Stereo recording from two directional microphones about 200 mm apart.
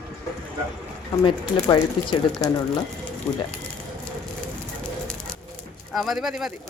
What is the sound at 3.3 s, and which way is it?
Speech, 5° left (ahead or behind).